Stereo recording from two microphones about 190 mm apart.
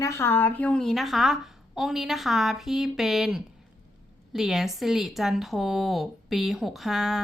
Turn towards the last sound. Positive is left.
turn(degrees=0)  # may be behind; listen again after turning